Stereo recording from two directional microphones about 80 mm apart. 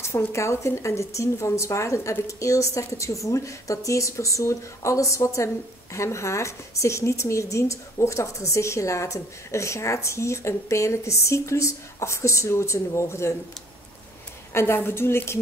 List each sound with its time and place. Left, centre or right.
0.0 s a woman's voice: left
14.5 s a woman's voice: left